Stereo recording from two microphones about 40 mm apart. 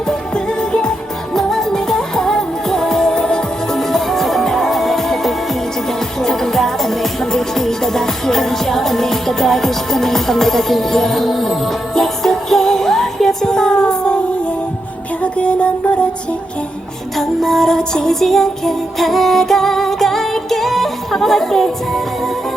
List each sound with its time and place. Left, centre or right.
0.1 s music: centre
3.8 s music: centre
15.2 s music: left
17.2 s music: centre